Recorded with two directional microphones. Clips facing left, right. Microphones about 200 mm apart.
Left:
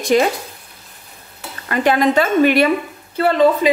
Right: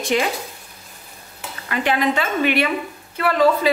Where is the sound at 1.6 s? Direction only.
40° left (ahead or behind).